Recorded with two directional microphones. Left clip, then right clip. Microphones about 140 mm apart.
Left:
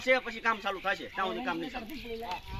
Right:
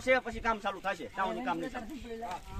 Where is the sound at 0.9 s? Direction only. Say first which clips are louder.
Left 2 dB; 90° right.